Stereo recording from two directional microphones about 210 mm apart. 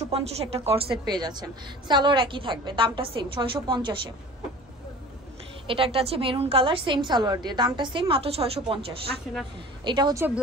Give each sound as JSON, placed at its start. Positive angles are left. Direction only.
{"t": 0.1, "sound": "a woman's voice", "side_deg": -30}
{"t": 5.7, "sound": "a woman's voice", "side_deg": -25}
{"t": 9.8, "sound": "a woman's voice", "side_deg": -20}